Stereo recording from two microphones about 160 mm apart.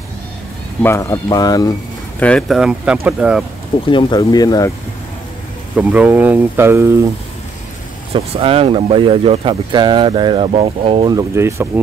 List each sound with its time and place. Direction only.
0.8 s speech: 15° left (ahead or behind)
2.1 s speech: 5° left (ahead or behind)
3.9 s speech: 25° left (ahead or behind)
5.8 s speech: 10° right (ahead or behind)
8.1 s speech: 35° right (ahead or behind)
11.1 s speech: 15° right (ahead or behind)